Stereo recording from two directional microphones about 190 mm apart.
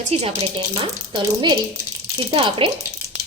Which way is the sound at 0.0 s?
35° right (ahead or behind).